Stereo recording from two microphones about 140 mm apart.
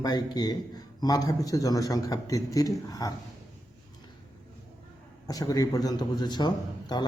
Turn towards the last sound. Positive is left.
turn(degrees=30)  # may be behind; listen again after turning